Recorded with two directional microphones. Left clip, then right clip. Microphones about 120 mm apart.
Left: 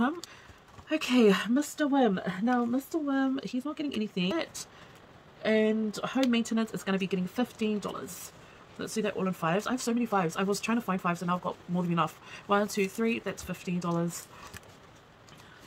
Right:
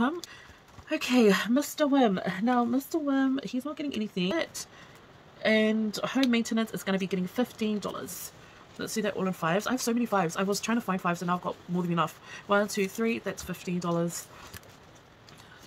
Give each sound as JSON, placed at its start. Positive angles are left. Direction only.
{"t": 0.8, "sound": "speech", "side_deg": -5}
{"t": 1.5, "sound": "speech", "side_deg": -20}
{"t": 3.2, "sound": "speech", "side_deg": -5}
{"t": 5.4, "sound": "speech", "side_deg": -15}
{"t": 6.3, "sound": "speech", "side_deg": -10}